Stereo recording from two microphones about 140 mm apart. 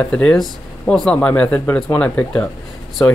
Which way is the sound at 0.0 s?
5° left (ahead or behind).